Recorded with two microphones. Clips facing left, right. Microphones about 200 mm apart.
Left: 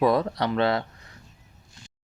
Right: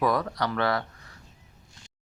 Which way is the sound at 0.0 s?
25° left (ahead or behind).